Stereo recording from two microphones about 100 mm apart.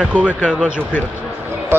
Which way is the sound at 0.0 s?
15° right (ahead or behind).